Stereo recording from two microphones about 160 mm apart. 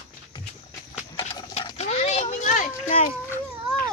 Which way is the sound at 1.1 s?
30° left (ahead or behind).